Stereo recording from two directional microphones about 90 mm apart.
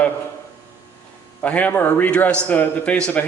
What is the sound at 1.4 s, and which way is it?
A man's voice, 15° left (ahead or behind).